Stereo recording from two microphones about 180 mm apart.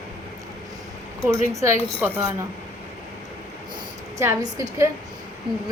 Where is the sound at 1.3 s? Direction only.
15° right (ahead or behind).